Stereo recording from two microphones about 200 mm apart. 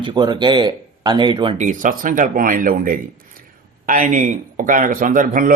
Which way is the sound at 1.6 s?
40° right (ahead or behind).